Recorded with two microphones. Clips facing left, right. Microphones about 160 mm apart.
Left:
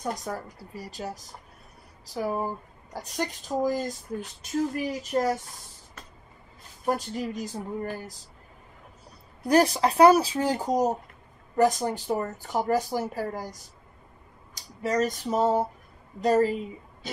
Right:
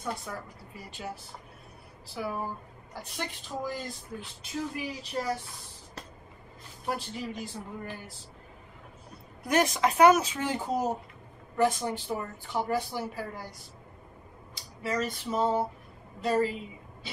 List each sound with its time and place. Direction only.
0.0 s a woman's voice: 40° left (ahead or behind)
6.9 s a woman's voice: 45° left (ahead or behind)
9.5 s speech: 35° left (ahead or behind)
17.0 s oink: 45° left (ahead or behind)